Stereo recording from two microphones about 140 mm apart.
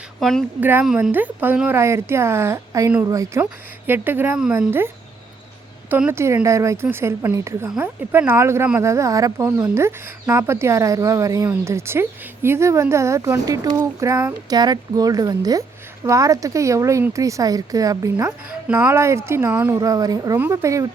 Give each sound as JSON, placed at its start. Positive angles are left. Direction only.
{"t": 0.2, "sound": "speech", "side_deg": 0}
{"t": 0.6, "sound": "a woman's voice", "side_deg": -10}
{"t": 5.9, "sound": "speech", "side_deg": -15}